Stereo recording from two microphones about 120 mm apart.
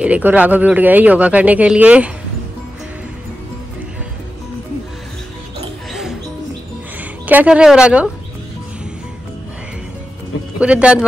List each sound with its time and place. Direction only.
0.0 s speech: 10° right (ahead or behind)
7.2 s speech: 10° right (ahead or behind)
10.6 s speech: 10° right (ahead or behind)